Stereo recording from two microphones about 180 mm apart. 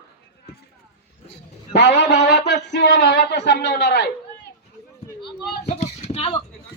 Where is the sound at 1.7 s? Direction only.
75° left (ahead or behind).